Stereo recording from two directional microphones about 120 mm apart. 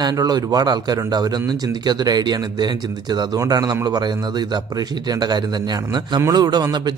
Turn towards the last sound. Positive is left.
turn(degrees=-35)  # may be behind; listen again after turning